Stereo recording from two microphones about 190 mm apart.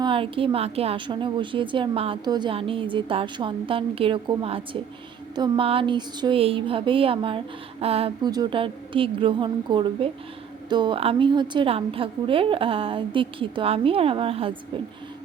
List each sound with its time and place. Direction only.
0.0 s a woman's voice: 30° right (ahead or behind)